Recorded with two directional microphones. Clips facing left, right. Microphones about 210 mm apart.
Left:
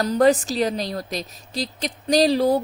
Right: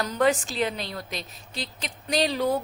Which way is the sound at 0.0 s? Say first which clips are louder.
Left 6 dB; 35° left (ahead or behind).